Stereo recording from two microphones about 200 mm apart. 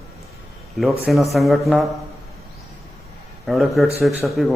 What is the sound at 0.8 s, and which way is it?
A man's voice, centre (ahead or behind).